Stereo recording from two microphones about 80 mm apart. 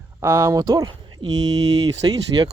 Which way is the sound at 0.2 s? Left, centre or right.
Right.